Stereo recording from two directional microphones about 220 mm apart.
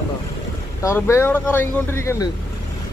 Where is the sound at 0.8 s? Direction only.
10° left (ahead or behind).